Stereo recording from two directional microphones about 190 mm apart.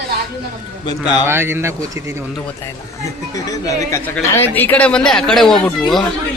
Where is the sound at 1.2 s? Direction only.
10° right (ahead or behind).